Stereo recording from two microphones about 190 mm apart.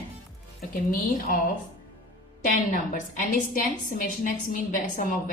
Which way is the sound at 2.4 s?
45° left (ahead or behind).